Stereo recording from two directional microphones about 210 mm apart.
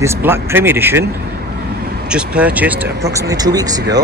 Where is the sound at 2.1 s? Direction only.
5° right (ahead or behind).